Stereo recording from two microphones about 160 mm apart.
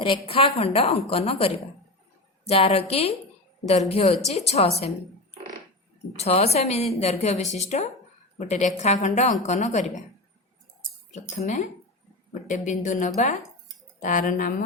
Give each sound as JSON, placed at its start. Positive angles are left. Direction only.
{"t": 0.0, "sound": "a woman's voice", "side_deg": 35}
{"t": 6.1, "sound": "a woman's voice", "side_deg": 40}
{"t": 11.1, "sound": "a woman's voice", "side_deg": 50}